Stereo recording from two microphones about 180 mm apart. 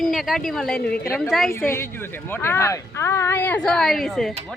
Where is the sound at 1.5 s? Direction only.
15° left (ahead or behind).